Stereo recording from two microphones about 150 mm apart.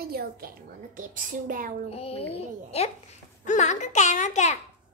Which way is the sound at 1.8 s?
40° left (ahead or behind).